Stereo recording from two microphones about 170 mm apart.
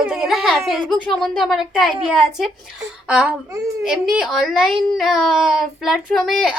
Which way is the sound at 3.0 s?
5° right (ahead or behind).